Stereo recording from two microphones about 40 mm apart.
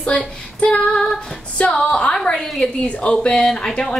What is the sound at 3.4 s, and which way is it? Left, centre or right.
Speech, centre.